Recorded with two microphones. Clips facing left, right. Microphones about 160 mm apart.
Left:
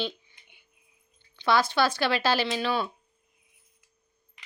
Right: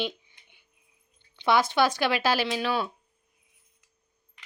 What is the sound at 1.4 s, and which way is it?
A child's voice, 20° right (ahead or behind).